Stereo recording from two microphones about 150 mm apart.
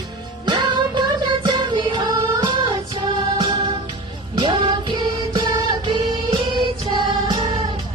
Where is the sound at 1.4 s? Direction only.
30° right (ahead or behind).